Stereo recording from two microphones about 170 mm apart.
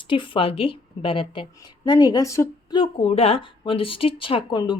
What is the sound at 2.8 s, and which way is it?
A woman's voice, 35° left (ahead or behind).